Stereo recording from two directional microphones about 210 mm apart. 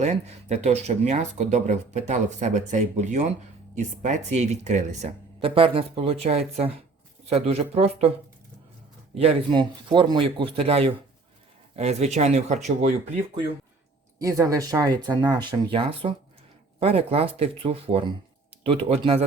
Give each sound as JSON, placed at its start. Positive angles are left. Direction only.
{"t": 0.0, "sound": "speech", "side_deg": -30}
{"t": 7.3, "sound": "speech", "side_deg": -30}
{"t": 9.1, "sound": "speech", "side_deg": -25}
{"t": 14.2, "sound": "speech", "side_deg": -15}